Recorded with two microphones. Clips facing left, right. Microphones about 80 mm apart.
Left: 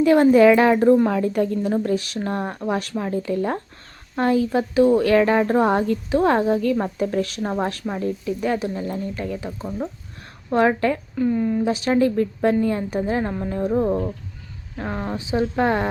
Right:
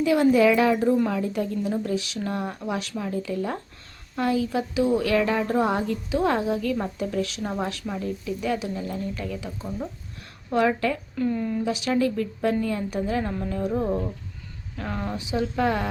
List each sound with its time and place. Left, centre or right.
0.0 s speech: left
9.6 s speech: left
10.5 s speech: left
11.2 s speech: centre
11.6 s speech: left